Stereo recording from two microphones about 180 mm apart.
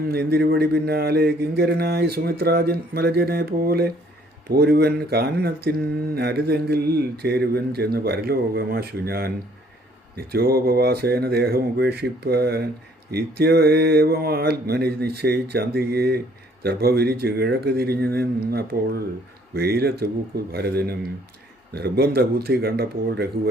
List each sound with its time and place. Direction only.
0.0 s a man's voice: 60° right (ahead or behind)
10.3 s a man's voice: 60° right (ahead or behind)